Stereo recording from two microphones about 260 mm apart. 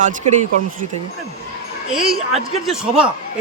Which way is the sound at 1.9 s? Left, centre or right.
Centre.